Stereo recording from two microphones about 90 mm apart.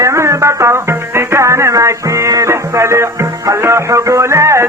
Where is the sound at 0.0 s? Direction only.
35° right (ahead or behind).